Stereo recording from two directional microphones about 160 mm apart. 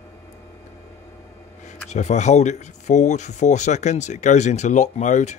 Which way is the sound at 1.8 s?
45° left (ahead or behind).